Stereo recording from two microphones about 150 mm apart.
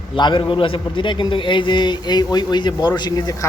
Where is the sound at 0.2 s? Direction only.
30° left (ahead or behind).